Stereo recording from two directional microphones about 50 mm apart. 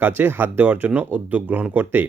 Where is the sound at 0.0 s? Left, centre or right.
Right.